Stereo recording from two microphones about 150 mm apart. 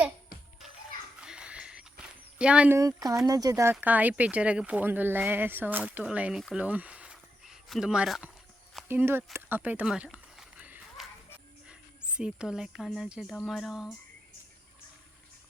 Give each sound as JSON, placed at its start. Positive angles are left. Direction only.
{"t": 1.2, "sound": "music", "side_deg": -5}
{"t": 2.4, "sound": "speech", "side_deg": -5}
{"t": 2.7, "sound": "speech", "side_deg": -20}
{"t": 6.6, "sound": "a sound", "side_deg": -10}
{"t": 11.7, "sound": "speech", "side_deg": -5}